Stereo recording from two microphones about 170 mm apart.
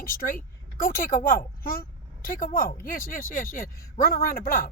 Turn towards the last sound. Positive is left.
turn(degrees=55)  # may be behind; listen again after turning